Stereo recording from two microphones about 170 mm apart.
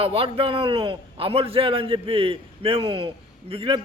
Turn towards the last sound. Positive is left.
turn(degrees=-30)  # may be behind; listen again after turning